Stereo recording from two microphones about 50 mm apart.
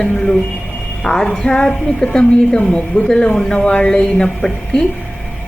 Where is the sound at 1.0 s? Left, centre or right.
Centre.